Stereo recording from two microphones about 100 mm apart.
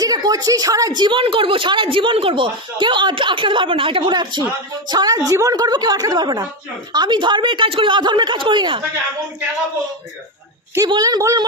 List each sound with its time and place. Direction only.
0.0 s a woman's voice: 40° right (ahead or behind)
10.9 s a woman's voice: 40° right (ahead or behind)